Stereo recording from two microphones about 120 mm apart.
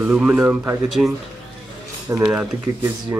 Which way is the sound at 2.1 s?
10° right (ahead or behind).